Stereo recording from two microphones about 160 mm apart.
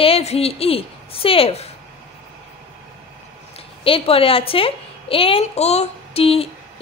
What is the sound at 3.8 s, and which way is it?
A woman's voice, 35° left (ahead or behind).